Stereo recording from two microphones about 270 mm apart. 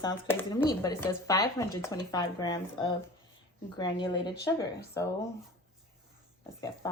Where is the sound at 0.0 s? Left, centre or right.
Centre.